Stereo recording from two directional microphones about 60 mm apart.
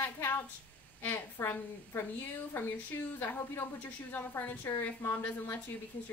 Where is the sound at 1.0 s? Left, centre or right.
Left.